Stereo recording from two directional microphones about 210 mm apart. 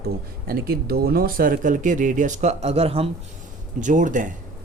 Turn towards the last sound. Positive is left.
turn(degrees=-40)  # may be behind; listen again after turning